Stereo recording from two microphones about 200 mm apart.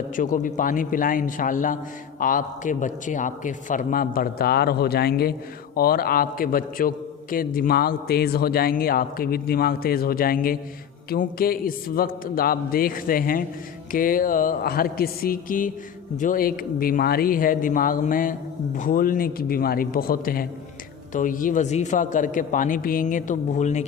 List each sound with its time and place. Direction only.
0.2 s a man's voice: 40° left (ahead or behind)